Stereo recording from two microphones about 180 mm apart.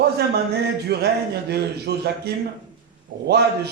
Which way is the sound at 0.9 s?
65° right (ahead or behind).